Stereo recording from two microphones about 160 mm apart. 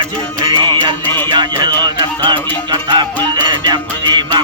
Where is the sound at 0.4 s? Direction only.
30° right (ahead or behind).